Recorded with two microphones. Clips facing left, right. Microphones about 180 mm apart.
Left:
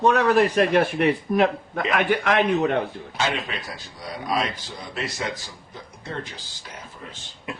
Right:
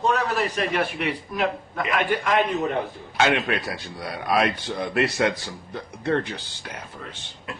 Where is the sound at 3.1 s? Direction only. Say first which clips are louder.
Right 6 dB; 65° right (ahead or behind).